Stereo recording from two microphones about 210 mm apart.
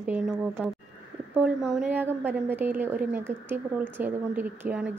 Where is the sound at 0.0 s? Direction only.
5° right (ahead or behind).